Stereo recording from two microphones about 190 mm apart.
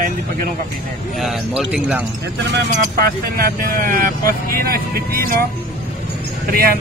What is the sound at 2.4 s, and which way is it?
Speech, 55° right (ahead or behind).